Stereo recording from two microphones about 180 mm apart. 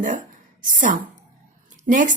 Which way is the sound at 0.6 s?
45° right (ahead or behind).